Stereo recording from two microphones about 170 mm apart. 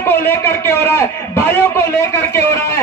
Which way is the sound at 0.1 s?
15° left (ahead or behind).